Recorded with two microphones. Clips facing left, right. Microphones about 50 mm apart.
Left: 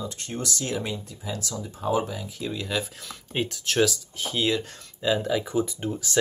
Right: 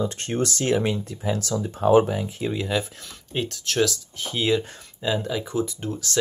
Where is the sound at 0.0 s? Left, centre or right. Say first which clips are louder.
Right 7 dB; right.